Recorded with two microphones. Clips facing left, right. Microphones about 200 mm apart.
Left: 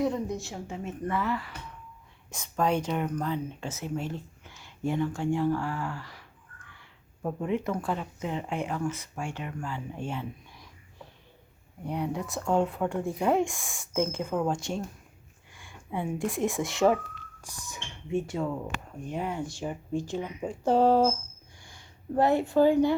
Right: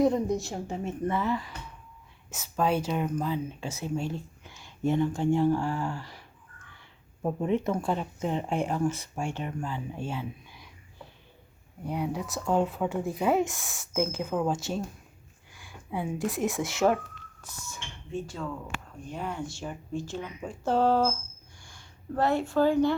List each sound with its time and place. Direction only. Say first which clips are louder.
0.0 s a woman's voice: right 4 dB; 40° right (ahead or behind)
1.0 s speech: right 1 dB; 20° right (ahead or behind)
2.3 s speech: even; 5° right (ahead or behind); by 6.7 s 25° right (ahead or behind)
7.2 s speech: right 2 dB; 15° right (ahead or behind)
9.9 s a sound: even; 5° right (ahead or behind)
11.9 s speech: even; 5° right (ahead or behind)
17.4 s speech: even; 15° left (ahead or behind)